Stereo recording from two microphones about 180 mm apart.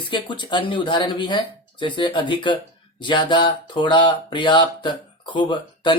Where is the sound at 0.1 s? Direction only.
25° left (ahead or behind).